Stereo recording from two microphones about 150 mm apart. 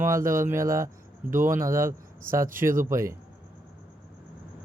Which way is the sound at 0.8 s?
60° right (ahead or behind).